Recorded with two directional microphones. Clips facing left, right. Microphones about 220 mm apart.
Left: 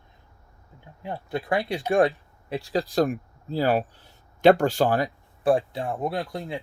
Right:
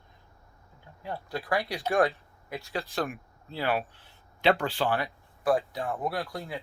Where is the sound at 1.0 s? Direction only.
20° left (ahead or behind); by 5.5 s 40° left (ahead or behind).